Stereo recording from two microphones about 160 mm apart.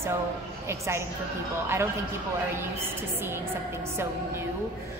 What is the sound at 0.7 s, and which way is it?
Speech, 15° right (ahead or behind).